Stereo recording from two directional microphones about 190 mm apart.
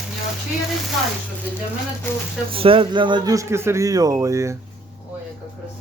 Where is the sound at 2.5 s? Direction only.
30° right (ahead or behind).